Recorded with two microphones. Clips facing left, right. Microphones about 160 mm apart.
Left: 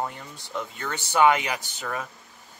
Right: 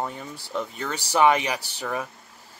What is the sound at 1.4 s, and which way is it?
Speech, 35° right (ahead or behind).